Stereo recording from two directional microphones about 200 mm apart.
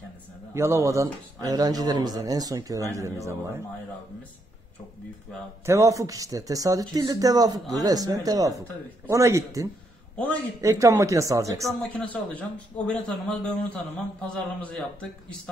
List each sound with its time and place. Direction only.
0.6 s speech: 15° right (ahead or behind)
5.7 s speech: 15° right (ahead or behind)
10.1 s a man's voice: 5° left (ahead or behind)
10.6 s speech: 15° right (ahead or behind)
11.8 s a man's voice: 5° left (ahead or behind)